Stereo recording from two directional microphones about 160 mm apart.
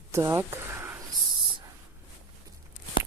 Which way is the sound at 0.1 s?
20° right (ahead or behind).